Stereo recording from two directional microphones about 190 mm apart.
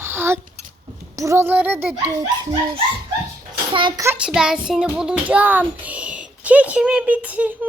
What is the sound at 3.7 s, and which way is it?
Speech, 25° right (ahead or behind).